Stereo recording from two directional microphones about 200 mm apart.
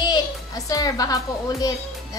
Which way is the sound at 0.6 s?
15° left (ahead or behind).